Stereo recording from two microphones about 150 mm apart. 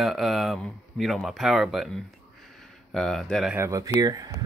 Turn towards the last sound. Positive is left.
turn(degrees=-25)  # may be behind; listen again after turning